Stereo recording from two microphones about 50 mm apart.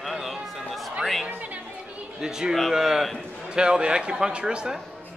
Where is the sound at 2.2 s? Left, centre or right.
Centre.